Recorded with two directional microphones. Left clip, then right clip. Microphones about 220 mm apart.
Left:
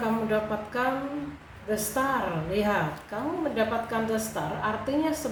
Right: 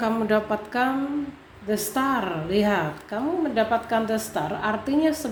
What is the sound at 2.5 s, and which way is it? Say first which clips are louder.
A woman's voice: right 4 dB; 45° right (ahead or behind).